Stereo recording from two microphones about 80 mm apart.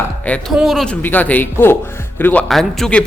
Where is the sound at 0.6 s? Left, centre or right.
Centre.